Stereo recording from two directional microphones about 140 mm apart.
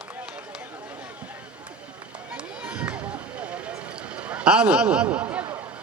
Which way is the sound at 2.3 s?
10° right (ahead or behind).